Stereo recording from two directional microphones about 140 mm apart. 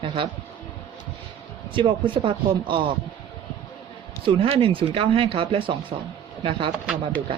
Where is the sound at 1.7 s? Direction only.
35° right (ahead or behind).